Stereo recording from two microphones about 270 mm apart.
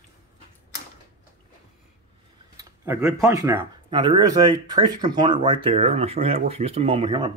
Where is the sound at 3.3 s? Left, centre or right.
Centre.